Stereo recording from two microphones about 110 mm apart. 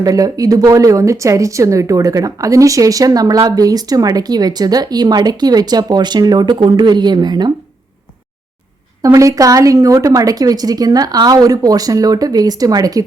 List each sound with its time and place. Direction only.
0.0 s a woman's voice: 35° right (ahead or behind)
9.0 s a woman's voice: 30° right (ahead or behind)